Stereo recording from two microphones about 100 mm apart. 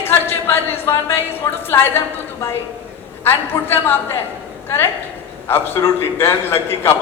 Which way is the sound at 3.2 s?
20° left (ahead or behind).